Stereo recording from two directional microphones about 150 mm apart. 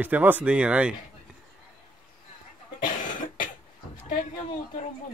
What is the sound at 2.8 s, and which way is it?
Cough, 60° left (ahead or behind).